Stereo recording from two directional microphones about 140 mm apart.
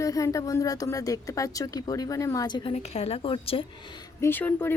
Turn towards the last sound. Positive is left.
turn(degrees=15)  # may be behind; listen again after turning